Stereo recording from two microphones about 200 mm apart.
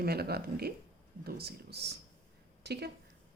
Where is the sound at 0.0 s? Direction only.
50° right (ahead or behind).